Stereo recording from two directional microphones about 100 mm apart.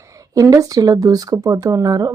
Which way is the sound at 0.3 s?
35° right (ahead or behind).